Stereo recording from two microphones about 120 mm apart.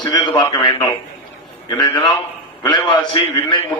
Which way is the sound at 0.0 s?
35° left (ahead or behind).